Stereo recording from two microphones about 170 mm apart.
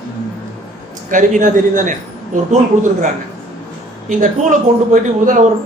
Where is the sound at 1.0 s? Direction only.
50° right (ahead or behind).